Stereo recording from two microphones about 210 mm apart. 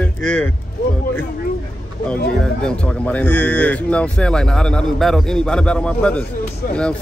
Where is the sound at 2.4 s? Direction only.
5° left (ahead or behind).